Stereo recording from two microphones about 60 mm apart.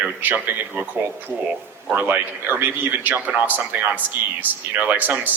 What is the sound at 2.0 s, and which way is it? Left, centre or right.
A man's voice, right.